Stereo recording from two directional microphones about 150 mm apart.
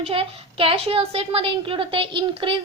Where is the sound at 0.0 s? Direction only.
40° right (ahead or behind).